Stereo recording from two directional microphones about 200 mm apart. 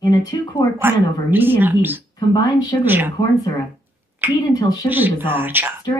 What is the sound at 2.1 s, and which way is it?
Speech, 20° left (ahead or behind).